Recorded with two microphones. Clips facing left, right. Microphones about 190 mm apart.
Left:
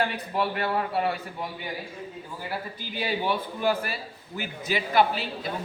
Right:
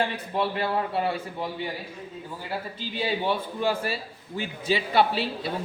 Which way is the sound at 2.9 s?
25° right (ahead or behind).